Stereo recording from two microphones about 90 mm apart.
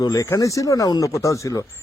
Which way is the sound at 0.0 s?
40° left (ahead or behind).